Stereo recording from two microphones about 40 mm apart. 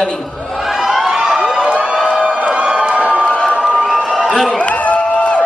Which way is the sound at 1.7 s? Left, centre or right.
Right.